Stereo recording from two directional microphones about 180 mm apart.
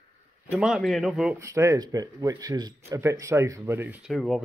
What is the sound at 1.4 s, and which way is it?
Speech, 15° right (ahead or behind).